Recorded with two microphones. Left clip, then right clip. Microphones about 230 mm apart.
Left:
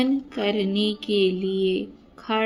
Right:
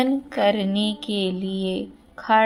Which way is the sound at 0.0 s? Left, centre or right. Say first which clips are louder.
Right 4 dB; right.